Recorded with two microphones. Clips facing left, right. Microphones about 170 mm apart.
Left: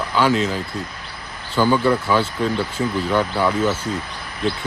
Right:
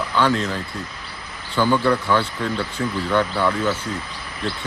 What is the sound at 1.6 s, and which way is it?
Speech, 10° left (ahead or behind).